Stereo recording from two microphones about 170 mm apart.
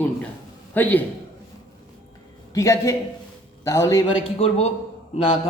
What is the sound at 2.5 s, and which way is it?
A man's voice, 20° left (ahead or behind).